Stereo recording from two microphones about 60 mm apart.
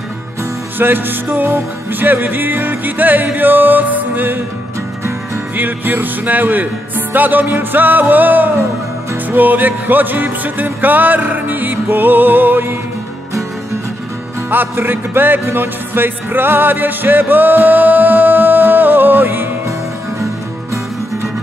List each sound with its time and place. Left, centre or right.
0.7 s music: right
5.6 s music: right
14.5 s music: right